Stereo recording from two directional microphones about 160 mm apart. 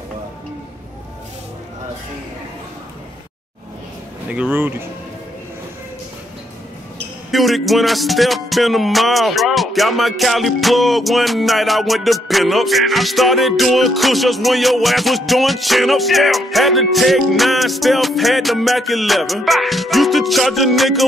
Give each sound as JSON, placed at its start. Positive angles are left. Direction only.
{"t": 4.3, "sound": "speech", "side_deg": -10}
{"t": 7.2, "sound": "music", "side_deg": 0}